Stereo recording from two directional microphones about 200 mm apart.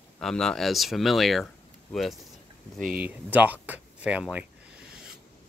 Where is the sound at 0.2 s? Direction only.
5° left (ahead or behind).